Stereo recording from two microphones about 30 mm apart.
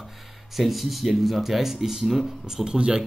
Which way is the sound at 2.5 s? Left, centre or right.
Right.